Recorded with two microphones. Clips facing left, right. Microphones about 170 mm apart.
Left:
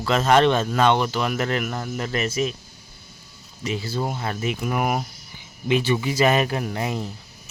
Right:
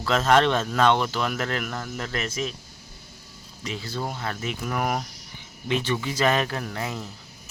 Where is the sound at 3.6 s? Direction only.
5° left (ahead or behind).